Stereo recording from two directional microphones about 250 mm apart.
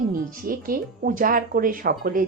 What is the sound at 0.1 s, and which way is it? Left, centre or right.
Speech, right.